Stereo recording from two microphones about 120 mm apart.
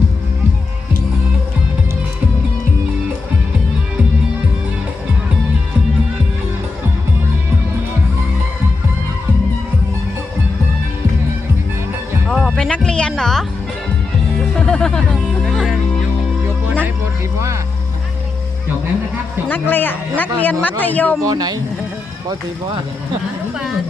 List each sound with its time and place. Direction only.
12.3 s music: 5° left (ahead or behind)
19.5 s speech: 15° left (ahead or behind)
21.2 s speech: 35° right (ahead or behind)